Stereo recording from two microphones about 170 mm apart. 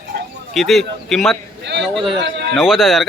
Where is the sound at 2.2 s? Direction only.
75° right (ahead or behind).